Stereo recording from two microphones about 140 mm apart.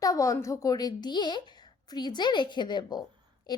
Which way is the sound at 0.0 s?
25° left (ahead or behind).